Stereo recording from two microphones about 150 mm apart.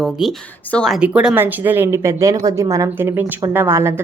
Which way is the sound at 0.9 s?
5° right (ahead or behind).